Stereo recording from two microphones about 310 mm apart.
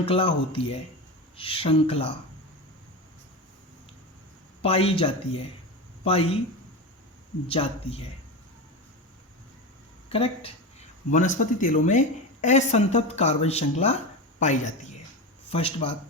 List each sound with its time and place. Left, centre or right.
0.0 s speech: centre
4.6 s speech: centre
7.4 s speech: centre
10.1 s speech: centre